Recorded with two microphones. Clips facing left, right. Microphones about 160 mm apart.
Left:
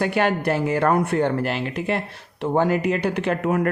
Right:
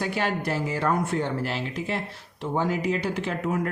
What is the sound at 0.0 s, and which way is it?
Speech, 60° left (ahead or behind).